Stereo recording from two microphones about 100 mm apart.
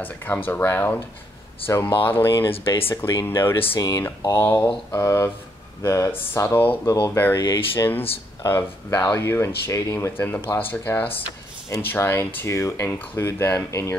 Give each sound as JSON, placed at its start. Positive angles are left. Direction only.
{"t": 0.0, "sound": "speech", "side_deg": 20}
{"t": 1.7, "sound": "speech", "side_deg": 30}
{"t": 2.3, "sound": "speech", "side_deg": 55}
{"t": 2.9, "sound": "speech", "side_deg": 25}